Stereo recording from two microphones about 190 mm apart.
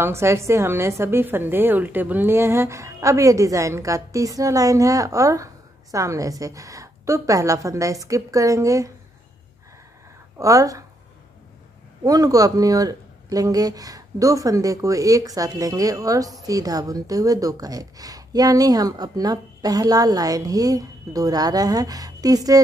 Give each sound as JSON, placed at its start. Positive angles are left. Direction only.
{"t": 0.0, "sound": "a woman's voice", "side_deg": -15}
{"t": 10.4, "sound": "a woman's voice", "side_deg": -15}
{"t": 12.0, "sound": "speech", "side_deg": -20}